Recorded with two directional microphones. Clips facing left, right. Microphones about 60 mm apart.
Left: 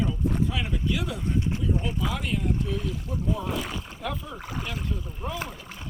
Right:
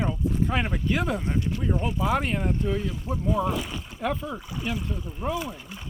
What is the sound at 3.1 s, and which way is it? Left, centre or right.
Speech, right.